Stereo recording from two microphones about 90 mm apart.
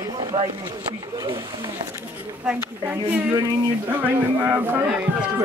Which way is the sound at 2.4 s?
15° right (ahead or behind).